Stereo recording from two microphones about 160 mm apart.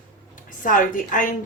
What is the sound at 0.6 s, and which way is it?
Speech, 55° left (ahead or behind).